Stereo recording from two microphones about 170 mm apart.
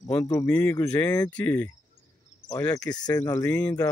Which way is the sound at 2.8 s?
20° left (ahead or behind).